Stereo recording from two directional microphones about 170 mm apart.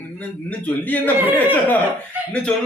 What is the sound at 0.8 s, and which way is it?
Speech, 10° left (ahead or behind).